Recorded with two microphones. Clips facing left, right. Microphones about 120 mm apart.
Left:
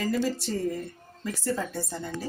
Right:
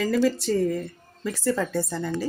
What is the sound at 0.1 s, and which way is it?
A woman's voice, 90° right.